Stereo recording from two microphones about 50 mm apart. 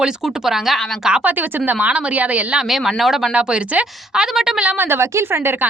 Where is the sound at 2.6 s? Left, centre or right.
Centre.